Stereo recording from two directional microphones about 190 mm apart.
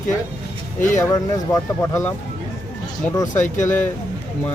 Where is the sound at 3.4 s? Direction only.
40° left (ahead or behind).